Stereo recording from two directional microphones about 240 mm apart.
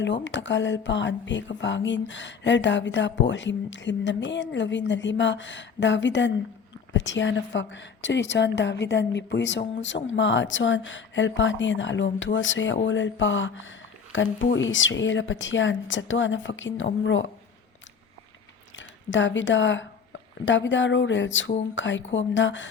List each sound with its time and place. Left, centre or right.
0.0 s a woman's voice: left
18.8 s a woman's voice: left